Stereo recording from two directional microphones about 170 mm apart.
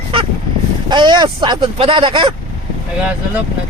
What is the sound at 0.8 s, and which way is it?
A man's voice, 25° right (ahead or behind).